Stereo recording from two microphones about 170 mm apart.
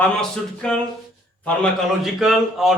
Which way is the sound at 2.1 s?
Centre (ahead or behind).